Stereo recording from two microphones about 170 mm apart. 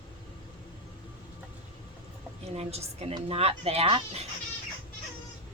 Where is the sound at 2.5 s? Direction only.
35° right (ahead or behind).